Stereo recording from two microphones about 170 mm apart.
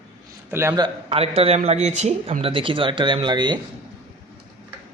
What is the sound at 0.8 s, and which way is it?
A man's voice, 35° right (ahead or behind).